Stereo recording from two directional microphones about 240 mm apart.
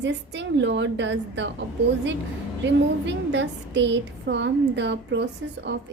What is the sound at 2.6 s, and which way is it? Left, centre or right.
A woman's voice, right.